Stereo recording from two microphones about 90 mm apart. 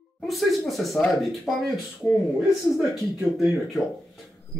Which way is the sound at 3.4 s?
Centre (ahead or behind).